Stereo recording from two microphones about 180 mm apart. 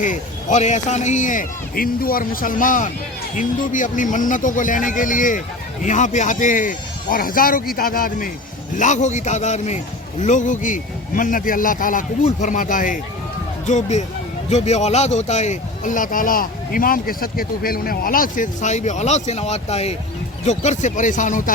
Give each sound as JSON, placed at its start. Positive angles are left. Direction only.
{"t": 0.0, "sound": "a man's voice", "side_deg": 45}